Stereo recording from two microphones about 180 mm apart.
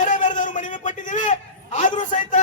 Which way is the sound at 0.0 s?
45° left (ahead or behind).